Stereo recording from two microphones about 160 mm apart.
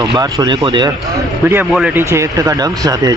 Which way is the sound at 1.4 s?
15° right (ahead or behind).